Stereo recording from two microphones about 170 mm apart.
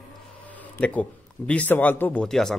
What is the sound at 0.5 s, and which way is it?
A man's voice, 10° left (ahead or behind).